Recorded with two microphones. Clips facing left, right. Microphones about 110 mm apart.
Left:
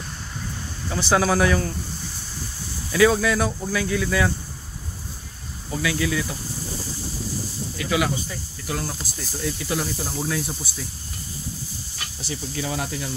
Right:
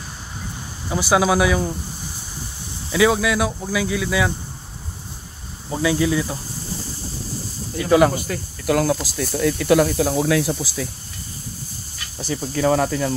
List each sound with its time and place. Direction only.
0.8 s speech: 15° right (ahead or behind)
2.9 s speech: 10° right (ahead or behind)
5.7 s speech: 25° right (ahead or behind)
7.8 s speech: 45° right (ahead or behind)
8.3 s speech: 70° right (ahead or behind); by 10.9 s 90° right
12.2 s speech: 45° right (ahead or behind)